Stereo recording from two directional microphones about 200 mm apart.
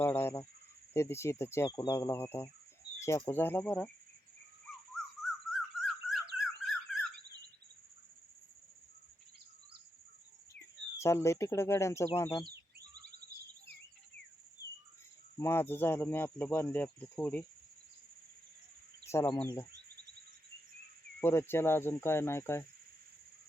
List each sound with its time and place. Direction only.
0.0 s a sound: 10° left (ahead or behind)
0.9 s speech: 15° left (ahead or behind)
5.5 s squawk: centre (ahead or behind)
6.4 s a sound: centre (ahead or behind)
10.9 s speech: 15° left (ahead or behind)
15.4 s speech: 10° left (ahead or behind)
19.0 s speech: 15° left (ahead or behind)
21.2 s speech: 10° left (ahead or behind)